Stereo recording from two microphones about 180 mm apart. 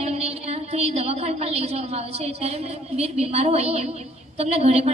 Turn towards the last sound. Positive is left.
turn(degrees=-35)  # may be behind; listen again after turning